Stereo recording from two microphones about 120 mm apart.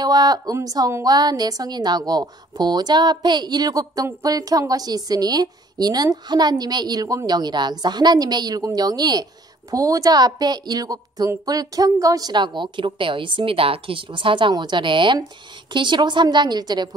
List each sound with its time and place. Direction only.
0.0 s a woman's voice: 35° right (ahead or behind)